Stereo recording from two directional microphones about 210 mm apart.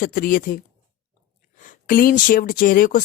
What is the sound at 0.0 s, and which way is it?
Speech, 40° left (ahead or behind).